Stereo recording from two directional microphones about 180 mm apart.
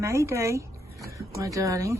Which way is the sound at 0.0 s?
15° right (ahead or behind).